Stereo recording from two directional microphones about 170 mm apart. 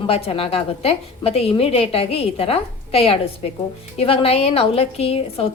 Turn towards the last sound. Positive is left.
turn(degrees=35)  # may be behind; listen again after turning